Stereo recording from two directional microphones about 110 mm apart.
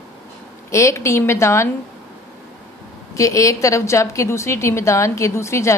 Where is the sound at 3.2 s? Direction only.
30° left (ahead or behind).